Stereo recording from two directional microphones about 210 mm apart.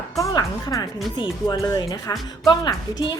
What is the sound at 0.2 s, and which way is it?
A woman's voice, 15° left (ahead or behind).